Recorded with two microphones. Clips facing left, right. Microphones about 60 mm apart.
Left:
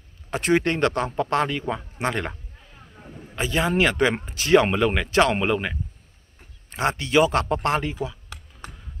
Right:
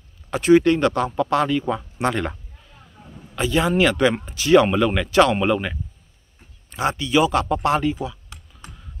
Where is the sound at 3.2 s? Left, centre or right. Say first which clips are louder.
Right 3 dB; left.